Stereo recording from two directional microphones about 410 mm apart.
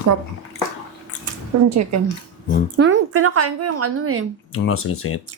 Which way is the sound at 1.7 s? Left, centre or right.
Right.